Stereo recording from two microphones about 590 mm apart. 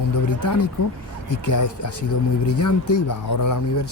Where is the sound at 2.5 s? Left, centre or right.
Left.